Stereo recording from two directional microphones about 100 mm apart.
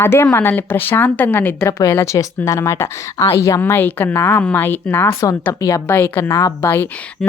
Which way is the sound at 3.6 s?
20° left (ahead or behind).